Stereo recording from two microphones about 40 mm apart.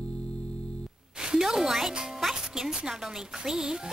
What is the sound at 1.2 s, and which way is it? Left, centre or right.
A woman's voice, centre.